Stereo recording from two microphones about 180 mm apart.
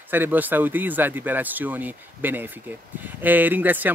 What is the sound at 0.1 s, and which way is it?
Speech, 10° right (ahead or behind).